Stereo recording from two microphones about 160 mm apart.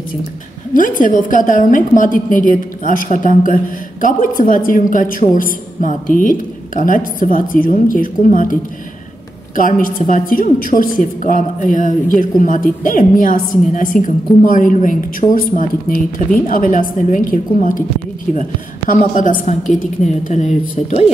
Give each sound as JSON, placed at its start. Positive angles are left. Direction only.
{"t": 0.7, "sound": "a woman's voice", "side_deg": 60}
{"t": 9.6, "sound": "a woman's voice", "side_deg": 55}
{"t": 18.9, "sound": "a woman's voice", "side_deg": 50}